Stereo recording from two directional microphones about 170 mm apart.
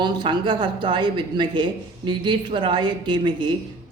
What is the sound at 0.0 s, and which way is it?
Speech, 25° right (ahead or behind).